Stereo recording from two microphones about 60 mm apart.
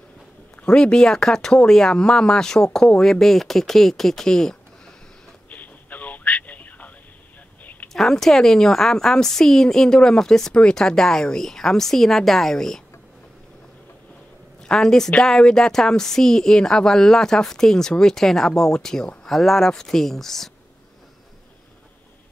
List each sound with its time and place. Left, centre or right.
0.6 s a woman's voice: centre
5.5 s a sound: left
7.9 s a woman's voice: centre
14.6 s a woman's voice: centre